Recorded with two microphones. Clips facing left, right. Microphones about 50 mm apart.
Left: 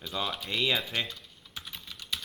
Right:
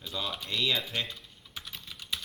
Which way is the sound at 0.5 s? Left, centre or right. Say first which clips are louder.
Left 1 dB; centre.